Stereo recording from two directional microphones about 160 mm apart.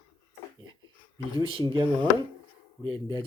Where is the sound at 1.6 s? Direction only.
30° right (ahead or behind).